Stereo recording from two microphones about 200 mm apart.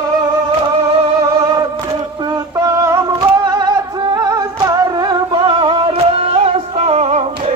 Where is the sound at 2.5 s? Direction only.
15° right (ahead or behind).